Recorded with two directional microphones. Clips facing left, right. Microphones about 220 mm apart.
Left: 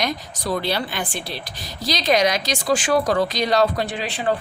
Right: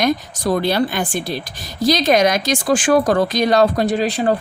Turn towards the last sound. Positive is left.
turn(degrees=-40)  # may be behind; listen again after turning